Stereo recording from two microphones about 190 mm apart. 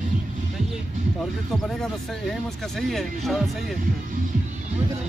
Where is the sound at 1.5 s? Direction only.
Centre (ahead or behind).